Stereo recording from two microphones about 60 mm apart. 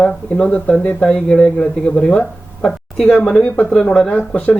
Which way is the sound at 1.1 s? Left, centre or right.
Centre.